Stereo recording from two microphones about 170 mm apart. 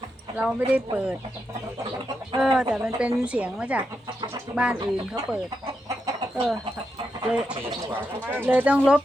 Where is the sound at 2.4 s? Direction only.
5° right (ahead or behind).